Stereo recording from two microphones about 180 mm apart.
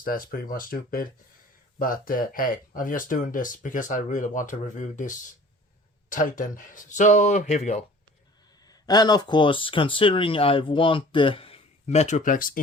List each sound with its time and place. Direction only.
0.0 s speech: 50° left (ahead or behind)
8.6 s speech: 20° left (ahead or behind); by 12.5 s 50° left (ahead or behind)